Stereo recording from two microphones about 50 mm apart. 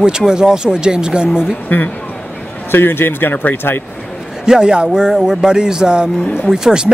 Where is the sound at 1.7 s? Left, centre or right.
Left.